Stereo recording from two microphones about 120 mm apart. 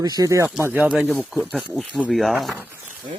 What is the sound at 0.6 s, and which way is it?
Speech, 15° right (ahead or behind).